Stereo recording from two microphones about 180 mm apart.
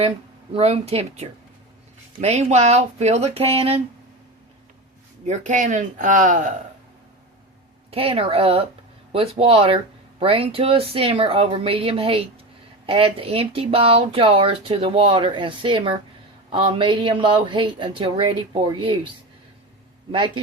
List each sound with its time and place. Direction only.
0.5 s speech: 35° right (ahead or behind)
5.2 s speech: 40° right (ahead or behind)
7.9 s speech: 30° right (ahead or behind)
20.1 s speech: 25° right (ahead or behind)